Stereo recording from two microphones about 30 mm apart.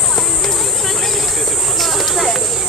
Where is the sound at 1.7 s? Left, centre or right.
Centre.